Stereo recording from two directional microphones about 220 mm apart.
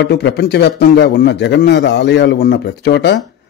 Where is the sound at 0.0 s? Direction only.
50° left (ahead or behind).